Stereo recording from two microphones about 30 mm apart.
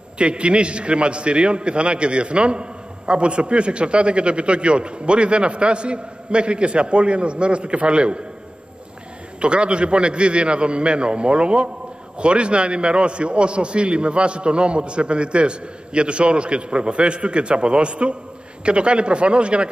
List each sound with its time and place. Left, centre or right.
0.2 s a man's voice: right
9.4 s a man's voice: right